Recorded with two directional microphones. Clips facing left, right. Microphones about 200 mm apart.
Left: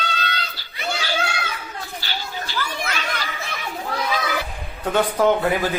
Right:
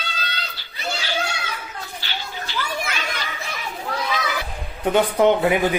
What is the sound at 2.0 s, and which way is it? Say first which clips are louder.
Children playing: left 2 dB; 40° left (ahead or behind).